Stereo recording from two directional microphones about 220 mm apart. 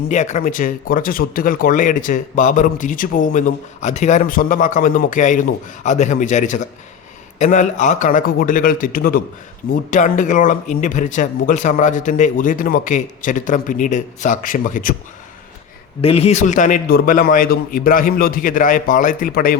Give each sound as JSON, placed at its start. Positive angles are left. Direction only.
{"t": 0.1, "sound": "speech", "side_deg": 35}
{"t": 16.0, "sound": "speech", "side_deg": 25}